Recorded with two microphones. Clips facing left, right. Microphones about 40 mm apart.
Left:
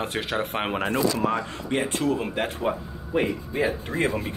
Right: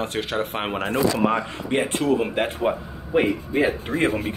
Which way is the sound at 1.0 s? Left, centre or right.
Right.